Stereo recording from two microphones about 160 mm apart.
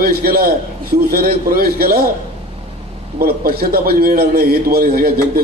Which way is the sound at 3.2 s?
70° right (ahead or behind).